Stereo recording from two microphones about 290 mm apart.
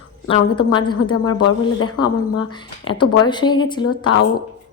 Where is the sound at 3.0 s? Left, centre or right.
Left.